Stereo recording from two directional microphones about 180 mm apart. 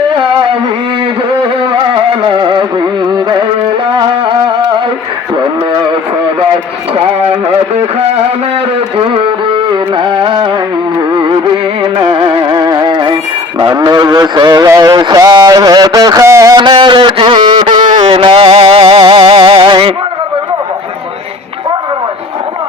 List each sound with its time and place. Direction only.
2.2 s carnatic music: 25° right (ahead or behind)
3.9 s music: 25° right (ahead or behind)
9.0 s music: 30° right (ahead or behind)
9.7 s carnatic music: 25° right (ahead or behind)
11.1 s music: 25° right (ahead or behind)
13.6 s a sound: 25° right (ahead or behind)